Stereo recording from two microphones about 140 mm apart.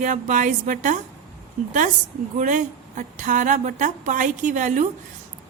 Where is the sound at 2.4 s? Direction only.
65° right (ahead or behind).